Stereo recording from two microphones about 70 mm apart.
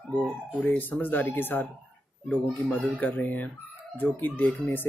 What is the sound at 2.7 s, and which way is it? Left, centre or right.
Speech, left.